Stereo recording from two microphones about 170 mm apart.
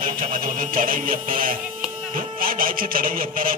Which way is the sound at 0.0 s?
55° right (ahead or behind).